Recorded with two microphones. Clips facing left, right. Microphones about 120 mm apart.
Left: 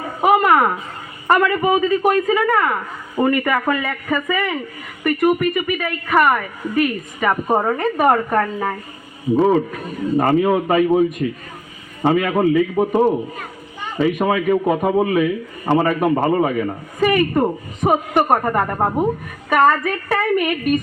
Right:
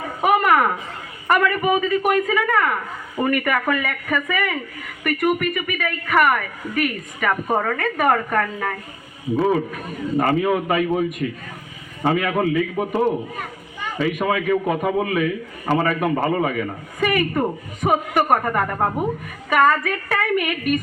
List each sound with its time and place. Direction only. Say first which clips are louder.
0.2 s a sound: left 3 dB; 25° left (ahead or behind)
1.3 s a woman's voice: left 3 dB; 25° left (ahead or behind)
10.2 s a woman's voice: left 3 dB; 30° left (ahead or behind)
14.3 s a woman's voice: left 1 dB; 30° left (ahead or behind)
19.5 s a woman's voice: left 2 dB; 30° left (ahead or behind)